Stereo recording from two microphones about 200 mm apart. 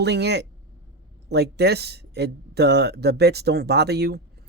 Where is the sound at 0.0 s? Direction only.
55° right (ahead or behind).